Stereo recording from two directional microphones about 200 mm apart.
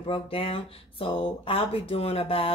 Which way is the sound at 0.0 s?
25° left (ahead or behind).